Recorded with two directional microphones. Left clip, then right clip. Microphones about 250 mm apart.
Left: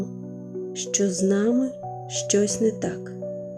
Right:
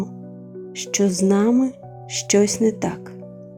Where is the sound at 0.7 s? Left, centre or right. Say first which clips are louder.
Right 4 dB; centre.